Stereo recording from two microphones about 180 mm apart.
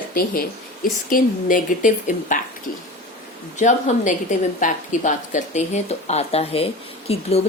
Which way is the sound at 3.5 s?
45° left (ahead or behind).